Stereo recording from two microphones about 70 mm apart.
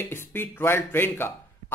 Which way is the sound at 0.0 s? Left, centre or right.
Left.